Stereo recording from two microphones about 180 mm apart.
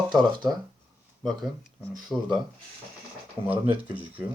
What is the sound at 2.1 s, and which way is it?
Speech, centre (ahead or behind).